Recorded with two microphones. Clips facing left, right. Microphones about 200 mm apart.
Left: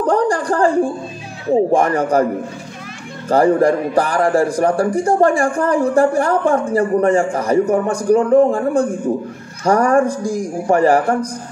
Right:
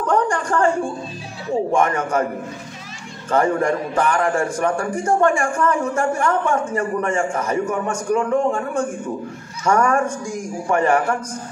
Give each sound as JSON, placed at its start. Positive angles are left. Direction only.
{"t": 0.0, "sound": "a sound", "side_deg": 35}
{"t": 1.5, "sound": "a man's voice", "side_deg": 35}
{"t": 3.3, "sound": "a man's voice", "side_deg": 35}